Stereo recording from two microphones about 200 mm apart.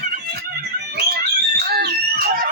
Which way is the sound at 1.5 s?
50° right (ahead or behind).